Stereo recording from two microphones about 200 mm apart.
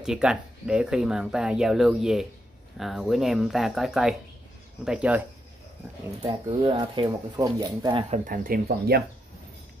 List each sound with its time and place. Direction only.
0.0 s speech: 5° right (ahead or behind)
6.2 s speech: 25° right (ahead or behind)
8.1 s speech: 45° right (ahead or behind)